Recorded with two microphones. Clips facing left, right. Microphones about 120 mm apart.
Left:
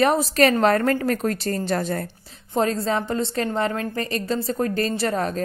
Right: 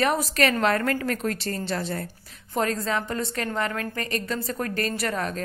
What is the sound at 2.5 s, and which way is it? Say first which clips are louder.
A woman's voice: left 4 dB; 30° left (ahead or behind).